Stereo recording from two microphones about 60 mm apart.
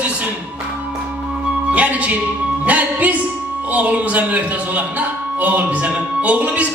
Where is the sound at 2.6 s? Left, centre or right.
Right.